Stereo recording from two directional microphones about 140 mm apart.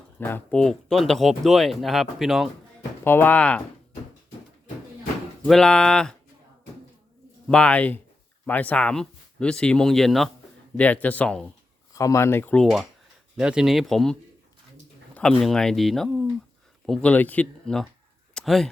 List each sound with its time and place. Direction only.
0.2 s speech: 15° left (ahead or behind)
3.0 s speech: 15° left (ahead or behind)
5.5 s speech: 5° left (ahead or behind)
7.4 s speech: 5° left (ahead or behind)
10.8 s speech: 10° left (ahead or behind)
11.9 s speech: 20° left (ahead or behind)
13.3 s speech: 5° right (ahead or behind)